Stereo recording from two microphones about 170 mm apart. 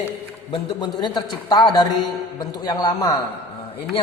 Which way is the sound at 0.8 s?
25° left (ahead or behind).